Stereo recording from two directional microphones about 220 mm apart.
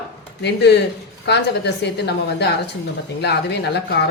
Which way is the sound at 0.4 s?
50° left (ahead or behind).